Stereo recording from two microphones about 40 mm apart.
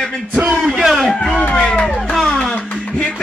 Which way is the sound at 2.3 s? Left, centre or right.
Centre.